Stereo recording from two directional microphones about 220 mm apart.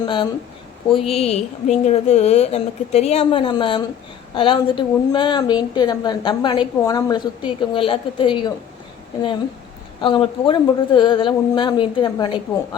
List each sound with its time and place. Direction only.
0.0 s a woman's voice: 20° left (ahead or behind)
10.0 s a woman's voice: 20° left (ahead or behind)